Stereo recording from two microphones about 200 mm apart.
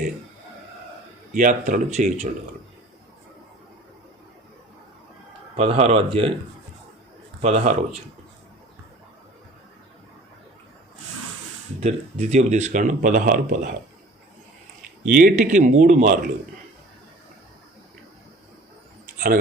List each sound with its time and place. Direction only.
1.3 s speech: 40° right (ahead or behind)
5.5 s speech: 30° right (ahead or behind)
7.4 s speech: 35° right (ahead or behind)
11.8 s speech: 30° right (ahead or behind)
15.0 s speech: 45° right (ahead or behind)